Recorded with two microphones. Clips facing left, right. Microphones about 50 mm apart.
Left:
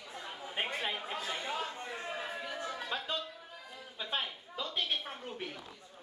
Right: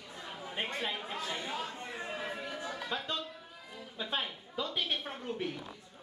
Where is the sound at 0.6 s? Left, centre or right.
Centre.